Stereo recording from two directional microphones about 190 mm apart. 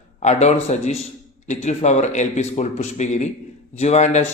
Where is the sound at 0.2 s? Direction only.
35° left (ahead or behind).